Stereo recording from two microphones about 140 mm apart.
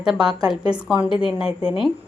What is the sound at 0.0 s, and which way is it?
A woman's voice, 5° right (ahead or behind).